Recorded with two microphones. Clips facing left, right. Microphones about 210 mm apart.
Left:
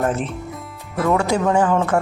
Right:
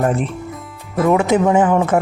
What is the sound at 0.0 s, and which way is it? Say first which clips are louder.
Speech: right 3 dB; centre (ahead or behind).